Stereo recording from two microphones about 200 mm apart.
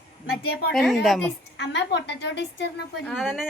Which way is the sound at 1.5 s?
60° left (ahead or behind).